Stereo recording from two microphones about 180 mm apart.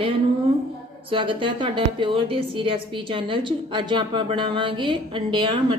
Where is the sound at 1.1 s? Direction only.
30° right (ahead or behind).